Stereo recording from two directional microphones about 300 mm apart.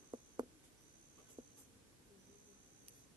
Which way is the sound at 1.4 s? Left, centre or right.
Centre.